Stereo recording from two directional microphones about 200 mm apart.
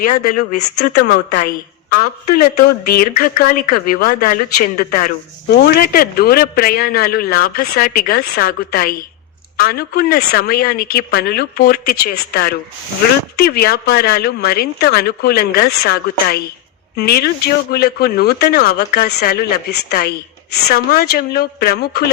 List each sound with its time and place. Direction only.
1.9 s speech: 45° left (ahead or behind)